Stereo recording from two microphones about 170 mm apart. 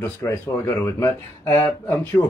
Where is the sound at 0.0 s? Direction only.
15° left (ahead or behind).